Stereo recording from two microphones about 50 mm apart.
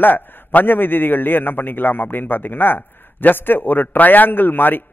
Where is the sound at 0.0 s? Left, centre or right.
Left.